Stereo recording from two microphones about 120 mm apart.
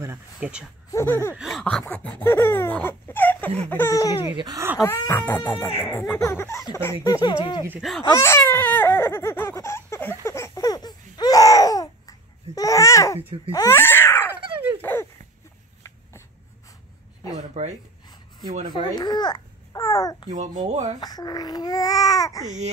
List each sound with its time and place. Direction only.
0.4 s speech: 10° right (ahead or behind)
0.8 s a sound: 20° left (ahead or behind)
1.3 s a sound: 5° right (ahead or behind)
1.6 s a sound: 10° left (ahead or behind)
3.6 s speech: 20° left (ahead or behind)
4.4 s speech: 35° right (ahead or behind)
4.7 s speech: 25° left (ahead or behind); by 7.6 s 40° left (ahead or behind)
8.1 s baby cry: 20° left (ahead or behind)
13.5 s a sound: 25° left (ahead or behind)
17.4 s speech: 70° right (ahead or behind)
18.9 s a child's voice: 35° left (ahead or behind)
20.2 s speech: 90° right
21.0 s speech: 35° left (ahead or behind)